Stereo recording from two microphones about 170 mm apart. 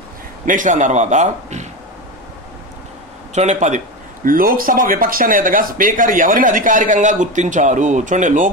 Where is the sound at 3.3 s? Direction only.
45° right (ahead or behind).